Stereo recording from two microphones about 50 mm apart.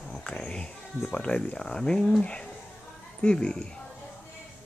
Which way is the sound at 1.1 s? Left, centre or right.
Left.